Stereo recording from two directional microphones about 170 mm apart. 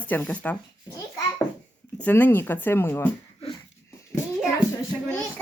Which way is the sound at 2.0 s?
10° left (ahead or behind).